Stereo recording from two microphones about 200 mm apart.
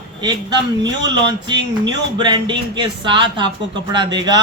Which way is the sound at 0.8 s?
20° right (ahead or behind).